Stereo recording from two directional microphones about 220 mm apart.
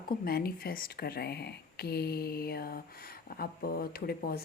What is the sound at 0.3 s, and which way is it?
A woman's voice, 45° left (ahead or behind).